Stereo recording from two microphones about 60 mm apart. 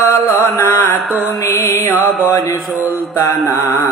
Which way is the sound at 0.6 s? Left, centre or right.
Left.